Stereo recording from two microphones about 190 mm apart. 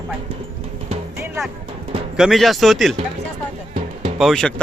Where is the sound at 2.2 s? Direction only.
Centre (ahead or behind).